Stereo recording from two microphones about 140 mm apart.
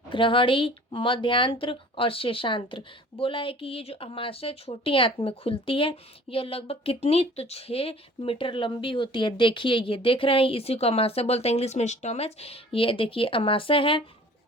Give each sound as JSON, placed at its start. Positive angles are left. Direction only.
{"t": 0.1, "sound": "speech", "side_deg": 35}